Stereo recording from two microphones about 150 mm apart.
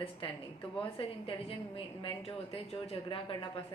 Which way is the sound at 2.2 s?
40° left (ahead or behind).